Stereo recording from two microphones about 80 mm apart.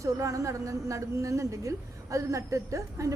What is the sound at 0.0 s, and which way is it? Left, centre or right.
A woman's voice, right.